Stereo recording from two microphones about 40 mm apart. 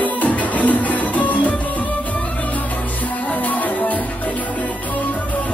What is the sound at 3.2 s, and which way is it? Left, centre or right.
Music, left.